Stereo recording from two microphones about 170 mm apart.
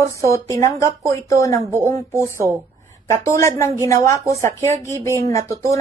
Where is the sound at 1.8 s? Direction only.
15° left (ahead or behind).